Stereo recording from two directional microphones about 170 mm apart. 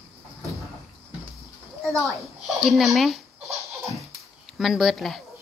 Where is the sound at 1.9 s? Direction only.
Centre (ahead or behind).